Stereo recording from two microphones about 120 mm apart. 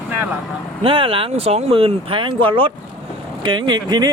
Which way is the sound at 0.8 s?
50° right (ahead or behind).